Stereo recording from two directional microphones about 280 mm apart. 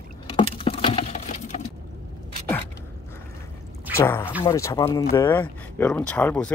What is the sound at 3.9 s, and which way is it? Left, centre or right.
Speech, centre.